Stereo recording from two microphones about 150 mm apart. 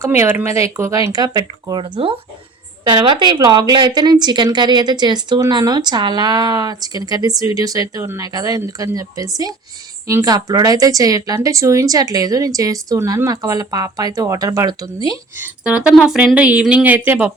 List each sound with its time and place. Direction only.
0.0 s a woman's voice: 15° right (ahead or behind)
15.4 s speech: 10° right (ahead or behind)